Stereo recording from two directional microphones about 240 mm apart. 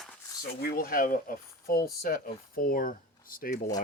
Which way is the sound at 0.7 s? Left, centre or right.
Left.